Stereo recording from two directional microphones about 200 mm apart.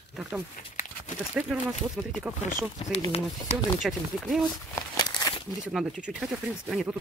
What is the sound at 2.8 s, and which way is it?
Speech, 25° left (ahead or behind).